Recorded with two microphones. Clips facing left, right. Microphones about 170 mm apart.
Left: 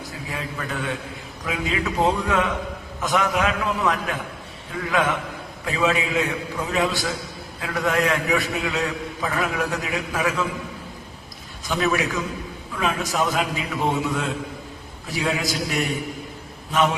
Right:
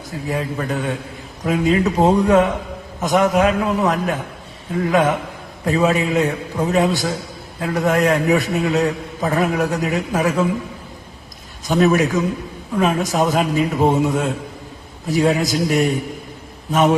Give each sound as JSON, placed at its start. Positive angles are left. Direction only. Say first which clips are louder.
{"t": 0.5, "sound": "a man's voice", "louder": "right 6 dB", "side_deg": -40}
{"t": 11.7, "sound": "a man's voice", "louder": "right 7 dB", "side_deg": -45}